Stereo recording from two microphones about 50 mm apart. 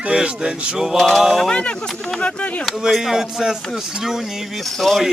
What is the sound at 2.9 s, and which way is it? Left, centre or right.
Speech, centre.